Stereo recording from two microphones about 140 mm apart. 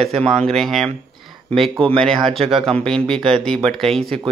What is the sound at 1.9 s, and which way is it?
Speech, 5° left (ahead or behind).